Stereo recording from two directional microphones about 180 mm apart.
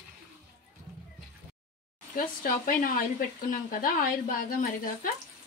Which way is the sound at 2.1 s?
50° left (ahead or behind).